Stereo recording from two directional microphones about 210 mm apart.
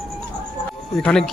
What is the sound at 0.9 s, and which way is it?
Speech, 5° left (ahead or behind).